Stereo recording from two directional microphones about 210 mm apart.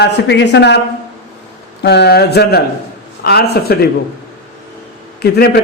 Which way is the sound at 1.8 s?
55° left (ahead or behind).